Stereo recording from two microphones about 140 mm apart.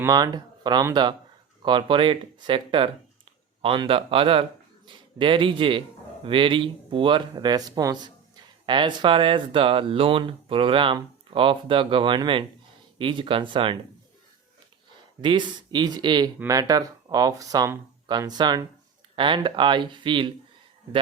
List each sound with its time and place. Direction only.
0.0 s speech: 30° right (ahead or behind)
15.2 s speech: 35° right (ahead or behind)